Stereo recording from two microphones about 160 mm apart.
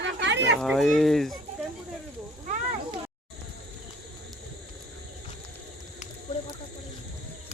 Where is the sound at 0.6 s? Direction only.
Centre (ahead or behind).